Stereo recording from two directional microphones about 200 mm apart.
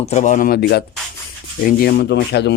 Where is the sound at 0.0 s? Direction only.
35° left (ahead or behind).